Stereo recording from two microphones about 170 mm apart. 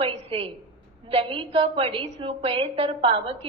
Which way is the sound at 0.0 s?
30° right (ahead or behind).